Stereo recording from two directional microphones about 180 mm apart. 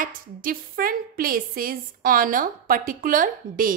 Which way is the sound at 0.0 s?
50° right (ahead or behind).